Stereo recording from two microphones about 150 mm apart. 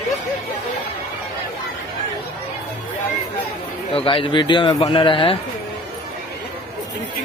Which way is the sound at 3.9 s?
35° left (ahead or behind).